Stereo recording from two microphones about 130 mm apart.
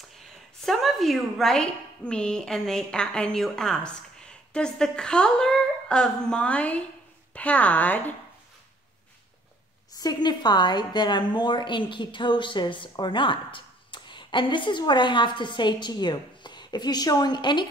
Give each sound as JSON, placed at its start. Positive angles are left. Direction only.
{"t": 0.6, "sound": "a woman's voice", "side_deg": 0}
{"t": 9.9, "sound": "a woman's voice", "side_deg": 30}